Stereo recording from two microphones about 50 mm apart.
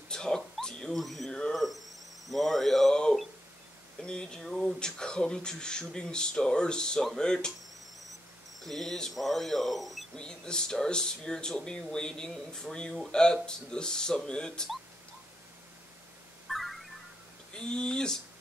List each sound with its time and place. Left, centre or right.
0.1 s dog: centre
0.9 s speech: centre
1.5 s a sound: centre
2.2 s cricket: centre
4.0 s a sound: centre
4.7 s speech: centre
8.6 s speech: centre
10.1 s speech: centre
16.4 s music: centre
17.5 s speech: centre